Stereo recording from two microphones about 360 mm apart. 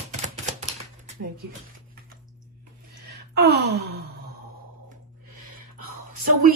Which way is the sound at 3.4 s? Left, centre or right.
Right.